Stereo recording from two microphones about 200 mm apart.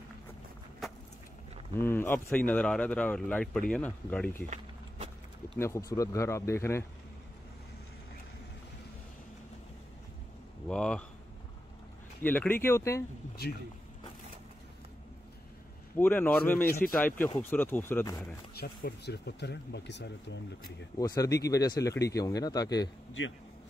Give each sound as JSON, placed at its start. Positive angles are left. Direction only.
{"t": 0.8, "sound": "vehicle", "side_deg": 0}
{"t": 1.8, "sound": "speech", "side_deg": 10}
{"t": 4.5, "sound": "a sound", "side_deg": -35}
{"t": 5.6, "sound": "speech", "side_deg": 15}
{"t": 10.7, "sound": "speech", "side_deg": 5}
{"t": 12.2, "sound": "speech", "side_deg": 10}
{"t": 16.0, "sound": "speech", "side_deg": 10}
{"t": 18.5, "sound": "speech", "side_deg": 50}
{"t": 21.0, "sound": "speech", "side_deg": 15}